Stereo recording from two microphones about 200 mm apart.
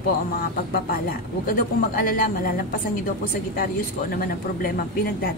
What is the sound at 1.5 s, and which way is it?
Speech, 45° left (ahead or behind).